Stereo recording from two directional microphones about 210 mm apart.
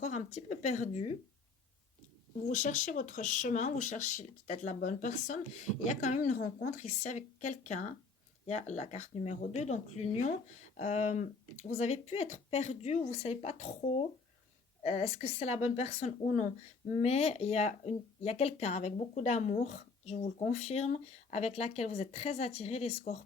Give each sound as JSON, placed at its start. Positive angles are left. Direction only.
{"t": 0.0, "sound": "speech", "side_deg": 35}
{"t": 2.5, "sound": "a woman's voice", "side_deg": 35}